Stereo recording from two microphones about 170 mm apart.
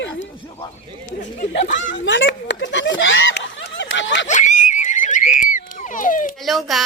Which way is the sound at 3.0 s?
90° left.